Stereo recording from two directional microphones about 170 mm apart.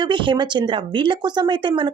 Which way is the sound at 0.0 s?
30° right (ahead or behind).